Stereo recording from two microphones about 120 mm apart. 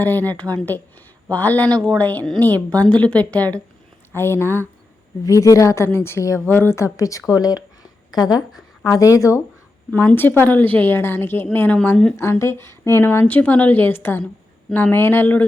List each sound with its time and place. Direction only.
0.0 s a woman's voice: 15° left (ahead or behind); by 7.6 s 30° left (ahead or behind)
9.0 s a woman's voice: 30° left (ahead or behind)
10.1 s a woman's voice: 15° left (ahead or behind)
12.1 s a woman's voice: 25° left (ahead or behind)